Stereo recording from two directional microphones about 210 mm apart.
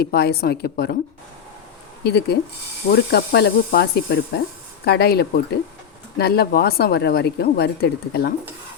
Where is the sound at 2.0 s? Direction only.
50° left (ahead or behind).